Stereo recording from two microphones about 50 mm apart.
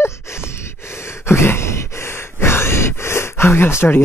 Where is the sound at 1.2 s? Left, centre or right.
Left.